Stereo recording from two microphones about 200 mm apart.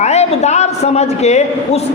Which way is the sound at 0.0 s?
35° left (ahead or behind).